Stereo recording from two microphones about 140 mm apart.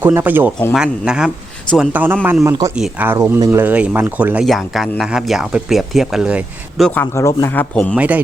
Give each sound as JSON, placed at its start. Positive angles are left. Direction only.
{"t": 0.0, "sound": "speech", "side_deg": -15}
{"t": 2.4, "sound": "speech", "side_deg": -25}
{"t": 2.7, "sound": "speech", "side_deg": -10}
{"t": 4.4, "sound": "speech", "side_deg": 0}
{"t": 6.8, "sound": "speech", "side_deg": 15}
{"t": 7.9, "sound": "speech", "side_deg": -10}